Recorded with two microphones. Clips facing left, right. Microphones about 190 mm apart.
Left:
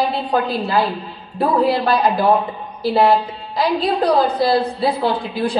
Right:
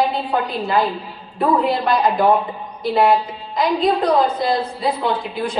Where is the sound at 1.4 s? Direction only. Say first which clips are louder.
Left 1 dB; 35° left (ahead or behind).